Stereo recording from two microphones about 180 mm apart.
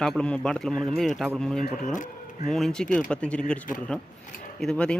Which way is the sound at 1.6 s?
45° left (ahead or behind).